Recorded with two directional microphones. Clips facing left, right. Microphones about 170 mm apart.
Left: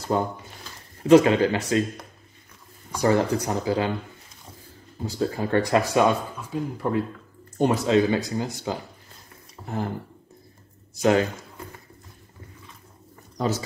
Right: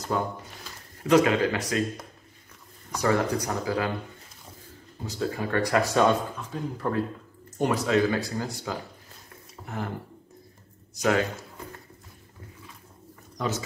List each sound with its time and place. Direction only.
0.1 s speech: 30° left (ahead or behind)
3.0 s speech: 30° left (ahead or behind)
5.0 s speech: 30° left (ahead or behind)
5.9 s speech: 10° left (ahead or behind)
7.5 s speech: 25° left (ahead or behind)
9.6 s speech: 5° left (ahead or behind)
11.0 s speech: 30° left (ahead or behind)
13.4 s speech: 35° left (ahead or behind)